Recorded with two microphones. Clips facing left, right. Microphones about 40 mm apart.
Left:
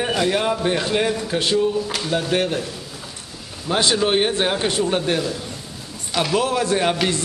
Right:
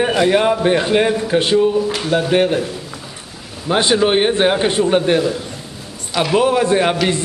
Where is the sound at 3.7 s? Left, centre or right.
Centre.